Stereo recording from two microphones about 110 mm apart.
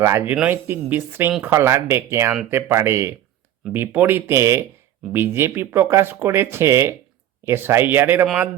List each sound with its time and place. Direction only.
0.0 s speech: 20° right (ahead or behind)